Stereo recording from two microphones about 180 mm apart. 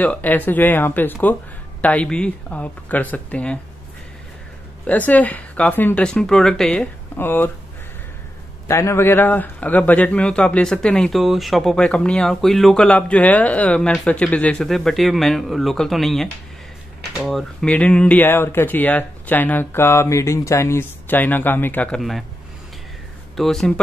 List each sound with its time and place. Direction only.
0.0 s speech: 10° left (ahead or behind)
4.8 s speech: 10° left (ahead or behind)
8.6 s a man's voice: 15° left (ahead or behind)
23.3 s a man's voice: centre (ahead or behind)